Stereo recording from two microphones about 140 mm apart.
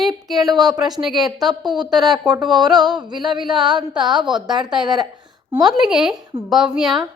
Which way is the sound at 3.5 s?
Centre (ahead or behind).